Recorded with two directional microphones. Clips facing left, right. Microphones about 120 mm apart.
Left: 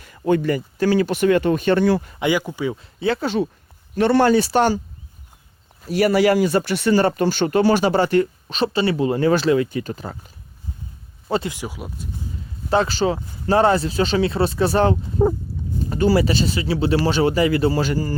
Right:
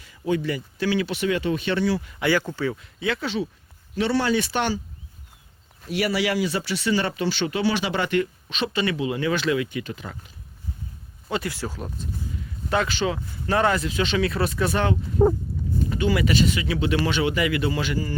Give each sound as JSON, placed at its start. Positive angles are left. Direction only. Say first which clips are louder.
{"t": 0.0, "sound": "speech", "louder": "left 6 dB", "side_deg": 50}
{"t": 2.1, "sound": "speech", "louder": "left 2 dB", "side_deg": 15}
{"t": 2.7, "sound": "speech", "louder": "left 5 dB", "side_deg": 35}
{"t": 4.4, "sound": "speech", "louder": "left 7 dB", "side_deg": 40}
{"t": 5.9, "sound": "speech", "louder": "left 8 dB", "side_deg": 45}
{"t": 11.4, "sound": "speech", "louder": "left 1 dB", "side_deg": 15}
{"t": 12.7, "sound": "speech", "louder": "left 5 dB", "side_deg": 35}